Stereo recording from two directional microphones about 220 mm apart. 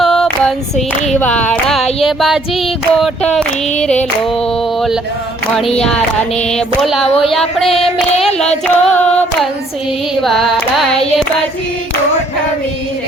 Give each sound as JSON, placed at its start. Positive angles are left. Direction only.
{"t": 0.0, "sound": "female singing", "side_deg": 0}
{"t": 1.1, "sound": "child singing", "side_deg": 5}
{"t": 7.2, "sound": "child singing", "side_deg": 0}
{"t": 8.6, "sound": "carnatic music", "side_deg": 5}
{"t": 10.2, "sound": "child singing", "side_deg": 0}